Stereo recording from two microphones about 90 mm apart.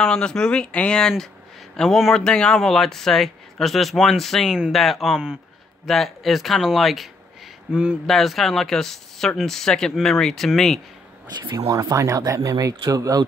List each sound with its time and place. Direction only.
0.0 s speech: 10° left (ahead or behind); by 8.0 s 10° right (ahead or behind)
8.1 s speech: centre (ahead or behind)
11.5 s speech: 40° right (ahead or behind)